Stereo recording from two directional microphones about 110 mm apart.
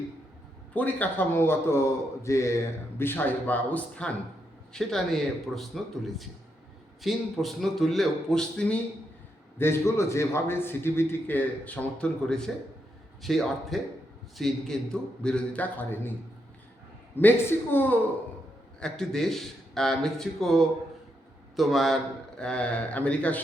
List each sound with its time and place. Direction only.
0.7 s a man's voice: 15° left (ahead or behind)
9.6 s a man's voice: 25° left (ahead or behind)
17.2 s speech: 20° left (ahead or behind)
18.8 s a man's voice: 5° left (ahead or behind)